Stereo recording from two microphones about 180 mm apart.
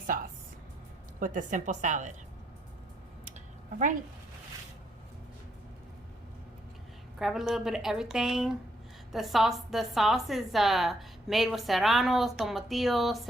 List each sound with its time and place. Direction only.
0.1 s music: 50° right (ahead or behind)
1.2 s a woman's voice: 45° right (ahead or behind)
7.2 s a woman's voice: centre (ahead or behind)